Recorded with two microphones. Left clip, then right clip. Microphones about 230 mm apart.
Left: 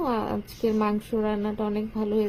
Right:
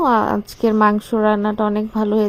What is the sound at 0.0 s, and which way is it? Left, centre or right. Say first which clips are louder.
A woman's voice: right 12 dB; right.